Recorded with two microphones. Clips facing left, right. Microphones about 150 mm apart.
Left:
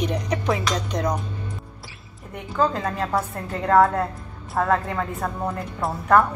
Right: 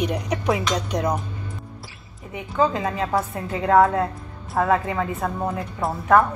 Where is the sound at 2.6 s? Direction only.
5° right (ahead or behind).